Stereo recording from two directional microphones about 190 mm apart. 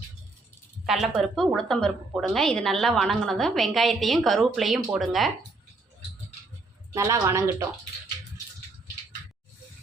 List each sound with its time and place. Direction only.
0.9 s a woman's voice: centre (ahead or behind)
6.9 s a woman's voice: 15° right (ahead or behind)